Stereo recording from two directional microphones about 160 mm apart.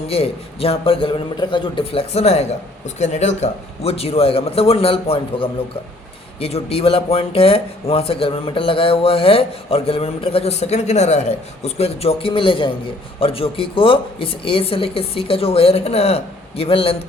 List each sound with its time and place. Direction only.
0.1 s speech: 40° left (ahead or behind)